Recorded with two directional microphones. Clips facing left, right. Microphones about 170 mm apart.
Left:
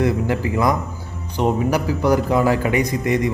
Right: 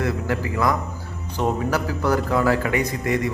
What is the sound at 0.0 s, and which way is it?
A man's voice, 20° left (ahead or behind).